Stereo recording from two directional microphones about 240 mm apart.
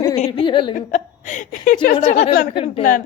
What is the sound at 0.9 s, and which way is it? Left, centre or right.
A woman's voice, left.